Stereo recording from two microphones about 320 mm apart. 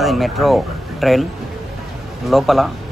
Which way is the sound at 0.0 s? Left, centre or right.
Centre.